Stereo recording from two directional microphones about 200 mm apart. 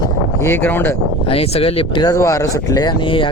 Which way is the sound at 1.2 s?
30° left (ahead or behind).